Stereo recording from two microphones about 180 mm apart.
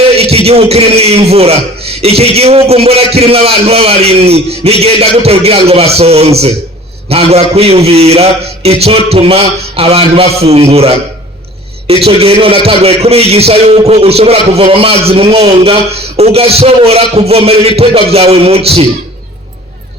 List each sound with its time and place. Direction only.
0.2 s a man's voice: 35° right (ahead or behind)
12.0 s a man's voice: 35° right (ahead or behind)